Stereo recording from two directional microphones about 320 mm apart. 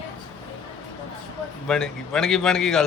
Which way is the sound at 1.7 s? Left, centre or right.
Centre.